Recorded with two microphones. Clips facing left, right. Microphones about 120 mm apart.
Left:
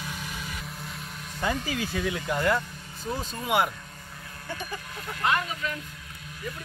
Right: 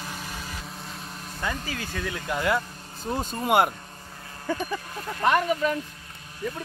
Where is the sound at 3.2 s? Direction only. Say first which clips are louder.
Right 4 dB; 45° right (ahead or behind).